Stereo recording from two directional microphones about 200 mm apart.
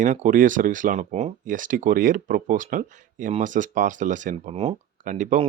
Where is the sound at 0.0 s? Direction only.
40° right (ahead or behind).